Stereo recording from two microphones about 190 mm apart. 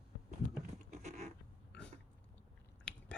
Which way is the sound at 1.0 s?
40° right (ahead or behind).